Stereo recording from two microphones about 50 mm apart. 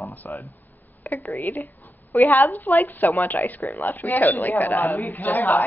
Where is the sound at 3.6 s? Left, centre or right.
Left.